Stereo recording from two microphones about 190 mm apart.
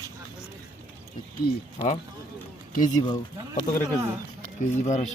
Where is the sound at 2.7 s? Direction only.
45° left (ahead or behind).